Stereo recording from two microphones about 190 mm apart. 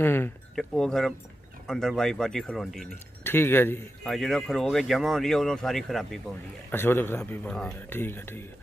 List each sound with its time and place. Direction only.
0.0 s speech: 10° left (ahead or behind)